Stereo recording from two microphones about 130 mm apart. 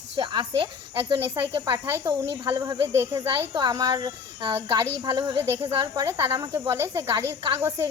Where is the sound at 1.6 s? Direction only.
25° right (ahead or behind).